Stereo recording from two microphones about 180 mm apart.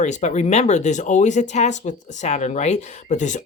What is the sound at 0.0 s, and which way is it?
Speech, 40° left (ahead or behind).